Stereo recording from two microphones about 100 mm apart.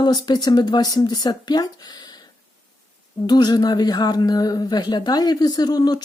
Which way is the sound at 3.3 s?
45° left (ahead or behind).